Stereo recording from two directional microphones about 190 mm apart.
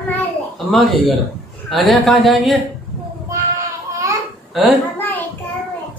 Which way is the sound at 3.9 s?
15° right (ahead or behind).